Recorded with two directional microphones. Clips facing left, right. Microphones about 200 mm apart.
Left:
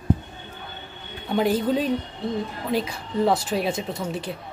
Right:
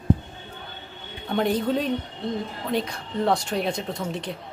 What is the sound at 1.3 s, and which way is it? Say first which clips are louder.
A woman's voice: left 2 dB; 5° left (ahead or behind).